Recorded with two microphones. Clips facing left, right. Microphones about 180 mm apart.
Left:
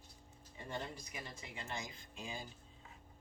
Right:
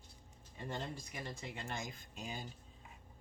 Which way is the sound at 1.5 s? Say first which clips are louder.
Right 2 dB; 50° right (ahead or behind).